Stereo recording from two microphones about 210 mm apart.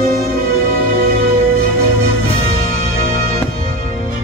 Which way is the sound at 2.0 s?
70° left (ahead or behind).